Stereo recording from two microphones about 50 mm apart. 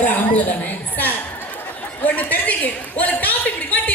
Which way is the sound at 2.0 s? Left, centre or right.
Left.